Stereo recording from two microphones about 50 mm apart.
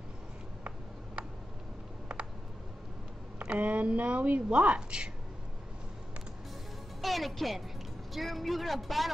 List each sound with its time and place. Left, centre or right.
3.3 s speech: right
7.0 s a man's voice: centre